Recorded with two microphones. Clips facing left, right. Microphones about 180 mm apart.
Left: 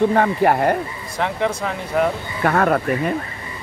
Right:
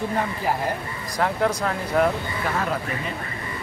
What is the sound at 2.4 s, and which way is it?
Speech, 60° left (ahead or behind).